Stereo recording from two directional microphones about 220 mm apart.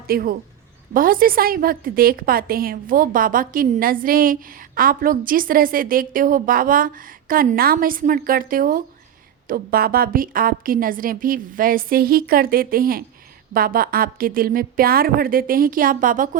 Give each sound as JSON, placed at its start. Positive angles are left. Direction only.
{"t": 0.1, "sound": "a woman's voice", "side_deg": -45}